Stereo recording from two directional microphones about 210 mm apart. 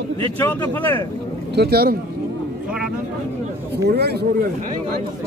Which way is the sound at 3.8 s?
50° right (ahead or behind).